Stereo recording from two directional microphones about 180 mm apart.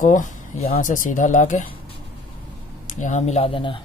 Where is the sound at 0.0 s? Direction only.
45° left (ahead or behind).